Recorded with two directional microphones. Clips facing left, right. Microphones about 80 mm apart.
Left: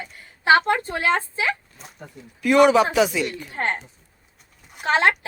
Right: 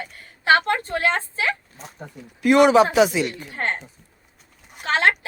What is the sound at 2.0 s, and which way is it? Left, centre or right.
Speech, right.